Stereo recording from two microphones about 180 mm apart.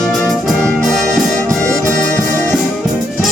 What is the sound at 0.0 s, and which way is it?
Brass instrument, 5° left (ahead or behind).